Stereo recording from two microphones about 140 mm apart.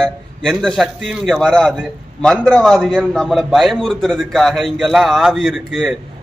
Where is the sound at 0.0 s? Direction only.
5° left (ahead or behind).